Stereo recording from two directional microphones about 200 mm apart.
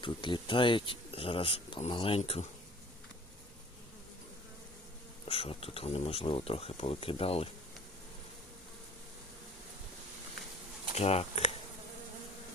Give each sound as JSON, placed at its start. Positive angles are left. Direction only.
{"t": 0.0, "sound": "speech", "side_deg": 25}
{"t": 5.2, "sound": "speech", "side_deg": 30}
{"t": 10.9, "sound": "speech", "side_deg": 30}